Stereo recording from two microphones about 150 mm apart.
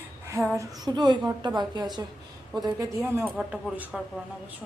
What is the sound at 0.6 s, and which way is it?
Speech, 30° right (ahead or behind).